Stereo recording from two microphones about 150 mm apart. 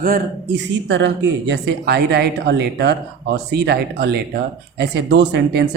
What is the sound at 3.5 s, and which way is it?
Speech, 90° right.